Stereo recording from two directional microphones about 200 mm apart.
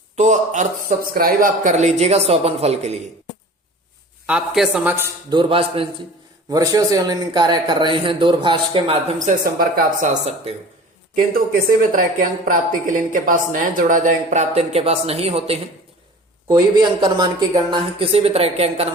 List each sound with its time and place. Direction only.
0.2 s speech: 35° right (ahead or behind)
4.3 s a man's voice: 5° right (ahead or behind)
5.3 s a man's voice: 25° right (ahead or behind)
9.2 s a woman's voice: 45° right (ahead or behind)
10.5 s speech: 30° right (ahead or behind)
11.8 s a woman's voice: 40° right (ahead or behind)